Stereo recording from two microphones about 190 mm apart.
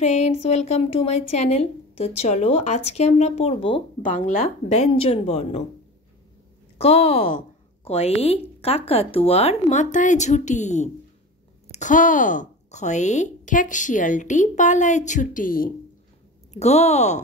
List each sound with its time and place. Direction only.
0.0 s a woman's voice: 35° left (ahead or behind)
4.0 s a woman's voice: 45° left (ahead or behind)
6.8 s a woman's voice: 30° left (ahead or behind); by 15.7 s 45° left (ahead or behind)
16.5 s a woman's voice: 35° left (ahead or behind)